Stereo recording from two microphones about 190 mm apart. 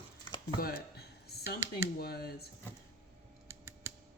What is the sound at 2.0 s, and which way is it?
Speech, 55° left (ahead or behind).